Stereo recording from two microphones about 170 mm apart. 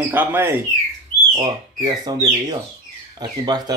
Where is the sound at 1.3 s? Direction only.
25° right (ahead or behind).